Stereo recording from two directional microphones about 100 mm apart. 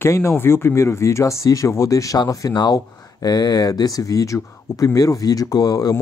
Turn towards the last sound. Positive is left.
turn(degrees=40)  # may be behind; listen again after turning